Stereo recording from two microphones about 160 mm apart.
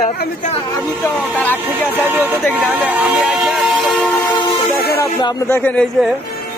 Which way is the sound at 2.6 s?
10° right (ahead or behind).